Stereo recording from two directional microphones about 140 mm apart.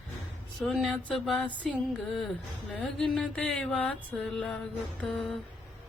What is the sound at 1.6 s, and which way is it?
Music, 5° left (ahead or behind).